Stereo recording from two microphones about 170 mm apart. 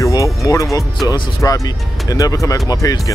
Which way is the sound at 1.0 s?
25° left (ahead or behind).